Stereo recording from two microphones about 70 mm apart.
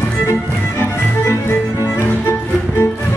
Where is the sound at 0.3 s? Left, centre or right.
Left.